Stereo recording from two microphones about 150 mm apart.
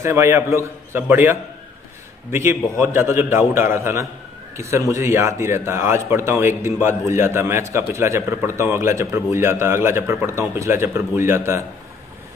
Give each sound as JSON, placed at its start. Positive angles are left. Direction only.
{"t": 0.0, "sound": "a man's voice", "side_deg": -20}